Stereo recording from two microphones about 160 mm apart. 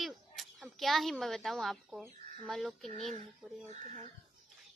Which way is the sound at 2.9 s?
50° right (ahead or behind).